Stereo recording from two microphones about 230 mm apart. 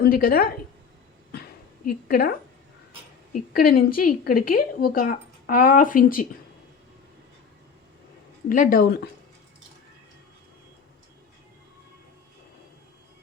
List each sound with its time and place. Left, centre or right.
0.0 s speech: left
1.3 s a sound: left
3.5 s speech: left
8.4 s speech: left